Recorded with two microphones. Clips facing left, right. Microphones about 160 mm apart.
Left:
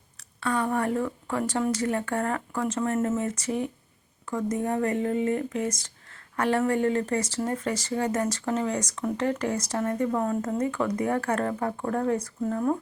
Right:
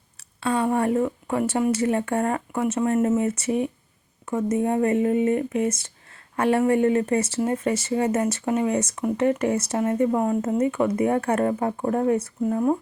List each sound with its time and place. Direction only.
0.3 s speech: 25° right (ahead or behind)